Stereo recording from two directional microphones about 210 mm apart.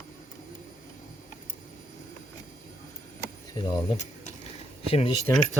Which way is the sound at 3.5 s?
20° left (ahead or behind).